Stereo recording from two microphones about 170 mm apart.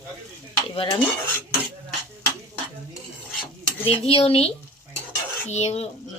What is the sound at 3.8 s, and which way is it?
Speech, 35° left (ahead or behind).